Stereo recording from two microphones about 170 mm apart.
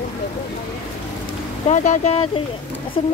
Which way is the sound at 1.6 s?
45° left (ahead or behind).